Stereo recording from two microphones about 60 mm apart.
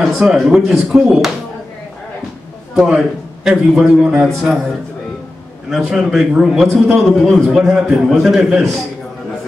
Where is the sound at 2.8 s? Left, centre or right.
Centre.